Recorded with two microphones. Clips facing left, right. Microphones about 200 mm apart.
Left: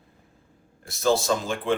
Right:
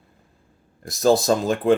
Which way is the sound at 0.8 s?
40° right (ahead or behind).